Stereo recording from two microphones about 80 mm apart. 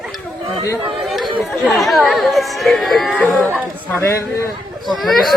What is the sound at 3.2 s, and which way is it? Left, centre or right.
Speech, centre.